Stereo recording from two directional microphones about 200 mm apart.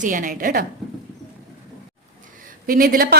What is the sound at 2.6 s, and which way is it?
Speech, 45° right (ahead or behind).